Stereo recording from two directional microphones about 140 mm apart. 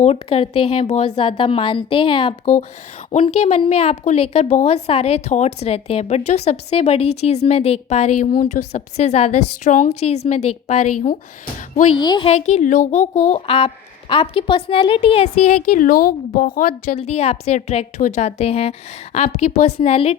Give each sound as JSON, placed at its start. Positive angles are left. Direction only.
{"t": 0.0, "sound": "a woman's voice", "side_deg": 45}
{"t": 11.9, "sound": "a woman's voice", "side_deg": 30}
{"t": 12.3, "sound": "a woman's voice", "side_deg": 55}
{"t": 15.7, "sound": "a woman's voice", "side_deg": 85}
{"t": 17.0, "sound": "a woman's voice", "side_deg": 50}